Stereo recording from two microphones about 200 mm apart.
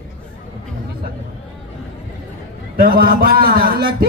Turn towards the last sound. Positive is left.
turn(degrees=-50)  # may be behind; listen again after turning